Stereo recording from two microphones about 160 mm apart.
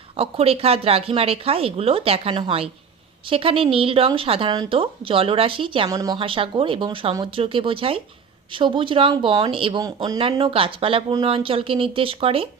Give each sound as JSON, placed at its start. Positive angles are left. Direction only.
{"t": 0.2, "sound": "speech", "side_deg": -40}
{"t": 5.9, "sound": "a woman's voice", "side_deg": -20}
{"t": 6.1, "sound": "speech", "side_deg": -35}